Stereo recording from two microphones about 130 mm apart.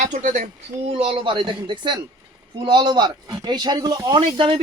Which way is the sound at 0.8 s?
45° right (ahead or behind).